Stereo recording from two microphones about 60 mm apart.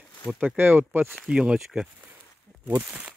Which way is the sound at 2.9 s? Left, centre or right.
Right.